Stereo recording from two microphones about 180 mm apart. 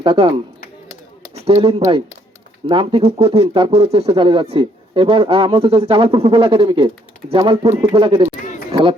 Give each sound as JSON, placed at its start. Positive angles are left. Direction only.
{"t": 0.0, "sound": "speech", "side_deg": -30}
{"t": 1.5, "sound": "speech", "side_deg": -35}